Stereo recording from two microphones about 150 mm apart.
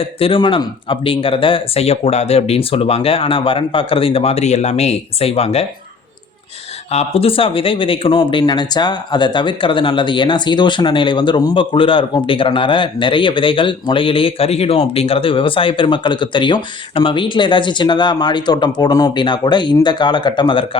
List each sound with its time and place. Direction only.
0.0 s speech: 40° left (ahead or behind)
6.9 s speech: 40° left (ahead or behind)